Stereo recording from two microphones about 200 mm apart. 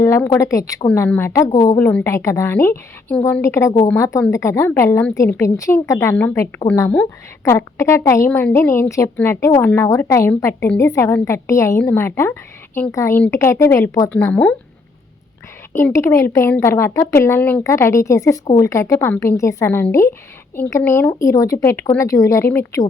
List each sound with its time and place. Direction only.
0.0 s a woman's voice: 15° left (ahead or behind)
15.7 s a woman's voice: 15° left (ahead or behind)